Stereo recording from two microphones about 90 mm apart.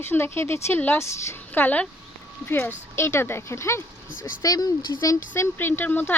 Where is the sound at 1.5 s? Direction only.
20° left (ahead or behind).